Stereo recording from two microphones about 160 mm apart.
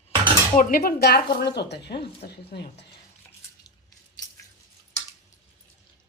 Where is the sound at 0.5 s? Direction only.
65° left (ahead or behind); by 2.8 s 90° left.